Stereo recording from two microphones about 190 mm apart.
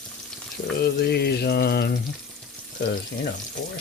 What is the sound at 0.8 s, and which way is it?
Speech, 60° left (ahead or behind).